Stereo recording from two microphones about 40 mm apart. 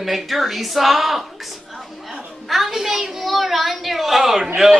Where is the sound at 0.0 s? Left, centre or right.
Centre.